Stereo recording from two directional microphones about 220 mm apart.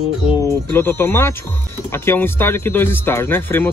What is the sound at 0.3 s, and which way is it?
Speech, 10° left (ahead or behind).